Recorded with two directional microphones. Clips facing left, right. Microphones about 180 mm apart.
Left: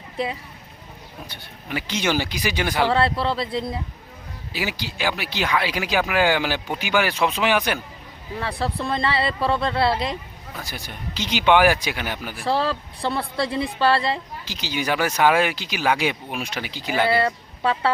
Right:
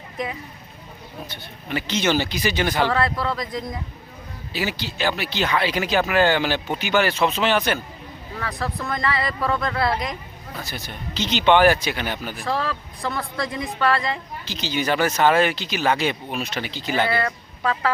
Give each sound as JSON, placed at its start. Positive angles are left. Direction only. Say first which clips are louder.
{"t": 0.2, "sound": "a woman's voice", "louder": "left 2 dB", "side_deg": 30}
{"t": 1.3, "sound": "speech", "louder": "right 2 dB", "side_deg": 10}
{"t": 2.9, "sound": "speech", "louder": "left 2 dB", "side_deg": 30}
{"t": 4.5, "sound": "speech", "louder": "right 2 dB", "side_deg": 10}
{"t": 8.4, "sound": "speech", "louder": "left 2 dB", "side_deg": 30}
{"t": 10.6, "sound": "speech", "louder": "right 1 dB", "side_deg": 15}
{"t": 12.5, "sound": "a woman's voice", "louder": "left 4 dB", "side_deg": 30}
{"t": 14.4, "sound": "speech", "louder": "right 3 dB", "side_deg": 10}
{"t": 17.1, "sound": "a woman's voice", "louder": "left 3 dB", "side_deg": 30}